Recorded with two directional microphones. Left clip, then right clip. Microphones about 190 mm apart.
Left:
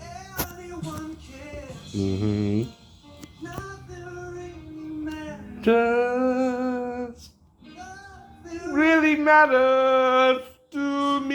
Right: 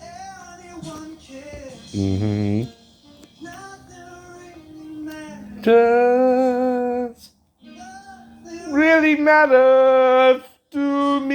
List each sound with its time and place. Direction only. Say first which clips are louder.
2.0 s speech: right 3 dB; 50° right (ahead or behind)
5.5 s music: right 6 dB; 60° right (ahead or behind)
8.7 s a sound: right 4 dB; 60° right (ahead or behind)